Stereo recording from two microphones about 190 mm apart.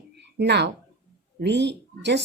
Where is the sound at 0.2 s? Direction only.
60° right (ahead or behind).